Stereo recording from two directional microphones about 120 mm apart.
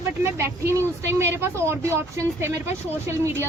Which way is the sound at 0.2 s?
20° right (ahead or behind).